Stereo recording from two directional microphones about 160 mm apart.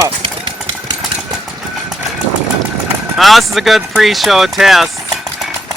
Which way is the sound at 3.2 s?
Centre (ahead or behind).